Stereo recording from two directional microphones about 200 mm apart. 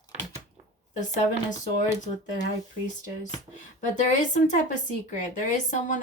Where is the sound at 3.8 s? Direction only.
40° left (ahead or behind).